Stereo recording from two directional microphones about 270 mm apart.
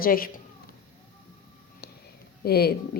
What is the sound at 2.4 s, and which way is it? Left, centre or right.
Speech, left.